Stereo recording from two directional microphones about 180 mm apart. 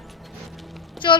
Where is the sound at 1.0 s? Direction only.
Centre (ahead or behind).